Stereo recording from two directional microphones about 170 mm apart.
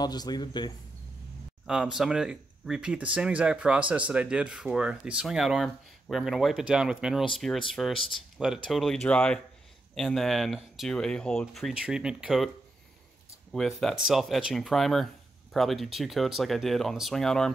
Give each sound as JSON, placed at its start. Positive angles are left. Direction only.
{"t": 0.0, "sound": "speech", "side_deg": 25}
{"t": 1.7, "sound": "speech", "side_deg": -5}
{"t": 13.5, "sound": "speech", "side_deg": 0}